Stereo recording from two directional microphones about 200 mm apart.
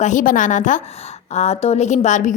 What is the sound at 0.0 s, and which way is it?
A woman's voice, 40° left (ahead or behind).